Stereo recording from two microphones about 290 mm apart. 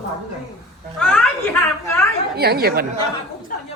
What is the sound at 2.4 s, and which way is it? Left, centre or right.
Speech, right.